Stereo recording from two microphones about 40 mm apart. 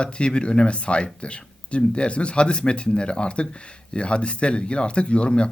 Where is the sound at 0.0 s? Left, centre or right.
Left.